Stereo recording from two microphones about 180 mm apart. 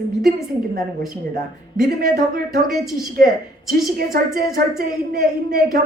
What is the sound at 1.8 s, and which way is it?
Speech, 60° right (ahead or behind).